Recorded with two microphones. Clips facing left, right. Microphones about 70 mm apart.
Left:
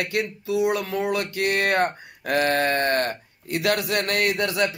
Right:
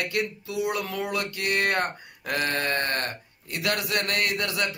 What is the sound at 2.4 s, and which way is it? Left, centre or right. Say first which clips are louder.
Speech: left 6 dB; left.